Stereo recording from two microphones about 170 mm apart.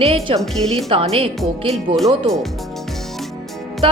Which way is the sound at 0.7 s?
35° right (ahead or behind).